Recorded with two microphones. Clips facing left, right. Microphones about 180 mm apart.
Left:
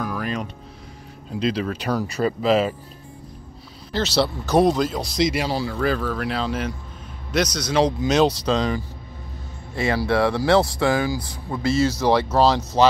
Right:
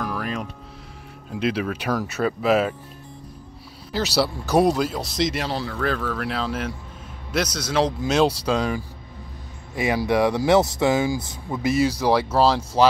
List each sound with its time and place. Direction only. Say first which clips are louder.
0.0 s music: left 1 dB; centre (ahead or behind)
1.3 s speech: left 1 dB; 5° right (ahead or behind)
4.2 s speech: left 1 dB; 10° right (ahead or behind)